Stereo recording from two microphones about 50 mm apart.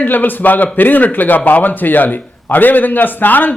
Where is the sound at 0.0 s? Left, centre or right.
Left.